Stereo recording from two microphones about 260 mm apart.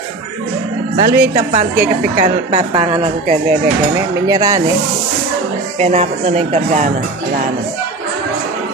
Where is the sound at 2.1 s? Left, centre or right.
Right.